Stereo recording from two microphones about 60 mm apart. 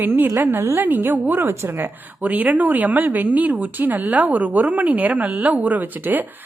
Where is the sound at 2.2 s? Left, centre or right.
Right.